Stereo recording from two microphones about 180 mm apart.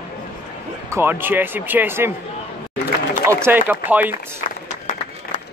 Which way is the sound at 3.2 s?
15° right (ahead or behind).